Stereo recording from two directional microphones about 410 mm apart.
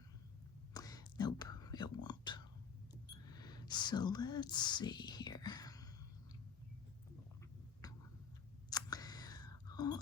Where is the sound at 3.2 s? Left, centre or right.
Centre.